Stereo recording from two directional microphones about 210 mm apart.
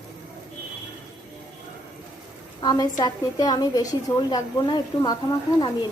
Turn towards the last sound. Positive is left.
turn(degrees=20)  # may be behind; listen again after turning